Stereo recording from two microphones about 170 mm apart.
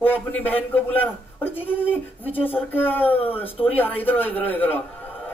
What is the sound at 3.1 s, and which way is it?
Speech, 35° left (ahead or behind).